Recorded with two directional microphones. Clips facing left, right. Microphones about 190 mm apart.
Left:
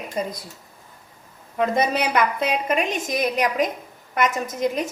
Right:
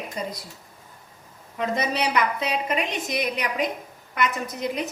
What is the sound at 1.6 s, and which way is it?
A woman's voice, 50° left (ahead or behind).